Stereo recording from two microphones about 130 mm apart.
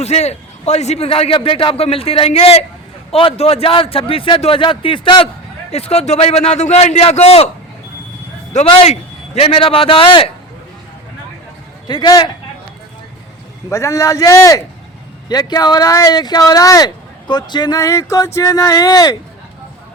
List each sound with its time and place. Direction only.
0.0 s a man's voice: 55° left (ahead or behind); by 5.3 s 40° left (ahead or behind)
5.7 s a man's voice: 50° left (ahead or behind)
8.5 s a man's voice: 55° left (ahead or behind)
11.9 s speech: 35° left (ahead or behind)
13.7 s speech: 25° left (ahead or behind)